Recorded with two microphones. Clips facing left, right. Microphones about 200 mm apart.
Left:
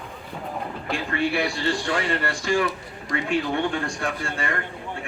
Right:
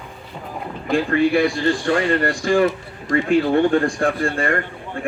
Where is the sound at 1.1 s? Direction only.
50° right (ahead or behind).